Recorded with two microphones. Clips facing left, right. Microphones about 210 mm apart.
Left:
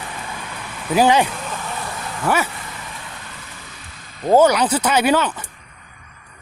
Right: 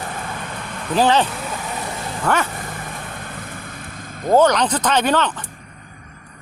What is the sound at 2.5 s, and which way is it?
Vehicle, 50° right (ahead or behind).